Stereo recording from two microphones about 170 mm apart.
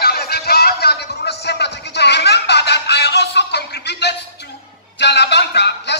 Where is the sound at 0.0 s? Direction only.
65° left (ahead or behind).